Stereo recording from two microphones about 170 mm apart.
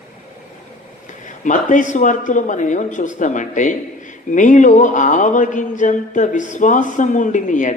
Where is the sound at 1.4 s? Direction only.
50° left (ahead or behind).